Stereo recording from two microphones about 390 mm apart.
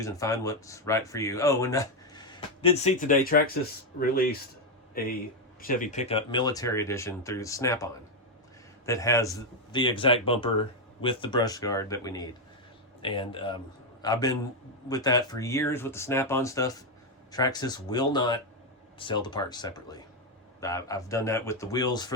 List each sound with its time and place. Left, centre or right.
0.0 s speech: centre
5.6 s speech: centre
8.9 s speech: centre